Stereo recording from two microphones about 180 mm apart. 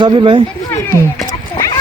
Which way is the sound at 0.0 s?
25° right (ahead or behind).